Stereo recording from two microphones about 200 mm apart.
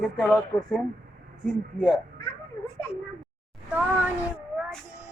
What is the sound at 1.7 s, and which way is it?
Speech, centre (ahead or behind).